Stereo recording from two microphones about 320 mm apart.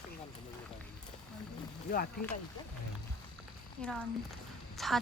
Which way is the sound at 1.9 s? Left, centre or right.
Left.